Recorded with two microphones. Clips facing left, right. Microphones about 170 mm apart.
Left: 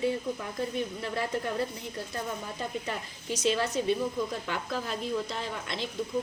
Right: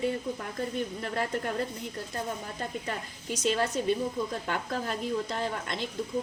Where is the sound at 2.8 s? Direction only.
50° right (ahead or behind).